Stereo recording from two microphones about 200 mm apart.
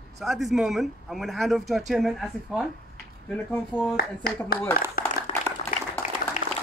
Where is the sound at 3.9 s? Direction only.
50° left (ahead or behind).